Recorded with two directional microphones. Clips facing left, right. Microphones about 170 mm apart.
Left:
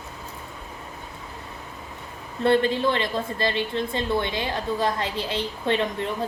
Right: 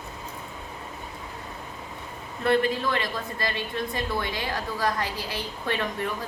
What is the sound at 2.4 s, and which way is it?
A woman's voice, 30° left (ahead or behind).